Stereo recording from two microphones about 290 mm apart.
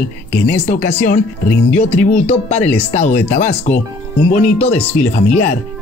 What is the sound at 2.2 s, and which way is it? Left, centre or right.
Speech, left.